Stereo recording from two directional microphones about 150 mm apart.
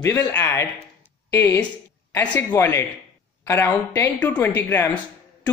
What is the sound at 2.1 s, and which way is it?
A woman's voice, 10° left (ahead or behind).